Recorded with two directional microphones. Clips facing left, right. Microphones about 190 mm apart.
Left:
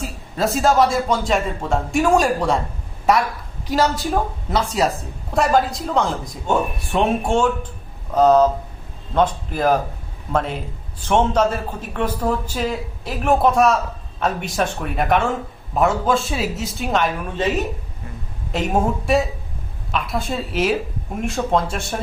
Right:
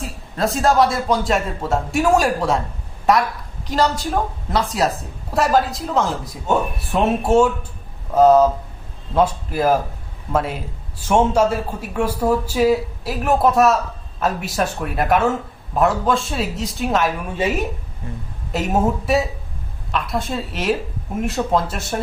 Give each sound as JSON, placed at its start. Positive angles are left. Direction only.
{"t": 0.0, "sound": "a man's voice", "side_deg": 0}
{"t": 18.5, "sound": "a man's voice", "side_deg": 0}